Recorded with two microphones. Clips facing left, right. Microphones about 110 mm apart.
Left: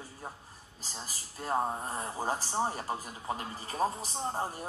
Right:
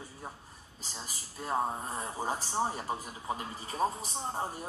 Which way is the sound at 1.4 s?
Centre (ahead or behind).